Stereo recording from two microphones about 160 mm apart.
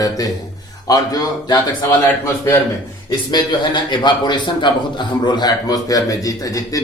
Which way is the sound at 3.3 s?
25° left (ahead or behind).